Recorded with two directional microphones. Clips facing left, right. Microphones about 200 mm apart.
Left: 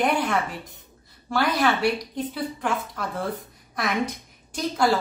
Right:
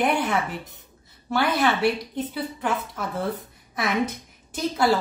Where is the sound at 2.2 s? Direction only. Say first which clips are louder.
Even; 5° right (ahead or behind).